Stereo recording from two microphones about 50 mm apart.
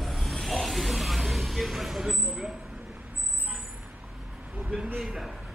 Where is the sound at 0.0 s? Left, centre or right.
Centre.